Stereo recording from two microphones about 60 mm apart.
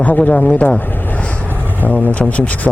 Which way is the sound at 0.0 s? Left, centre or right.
Left.